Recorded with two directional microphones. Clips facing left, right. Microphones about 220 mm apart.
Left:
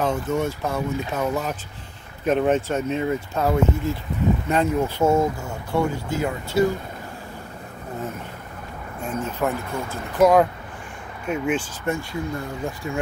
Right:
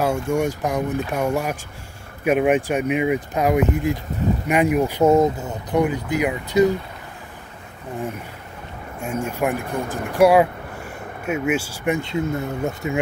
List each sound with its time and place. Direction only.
0.3 s speech: 15° right (ahead or behind)
9.0 s speech: 10° right (ahead or behind)